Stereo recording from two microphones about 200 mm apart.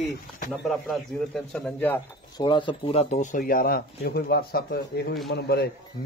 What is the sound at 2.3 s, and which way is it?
A man's voice, 20° left (ahead or behind).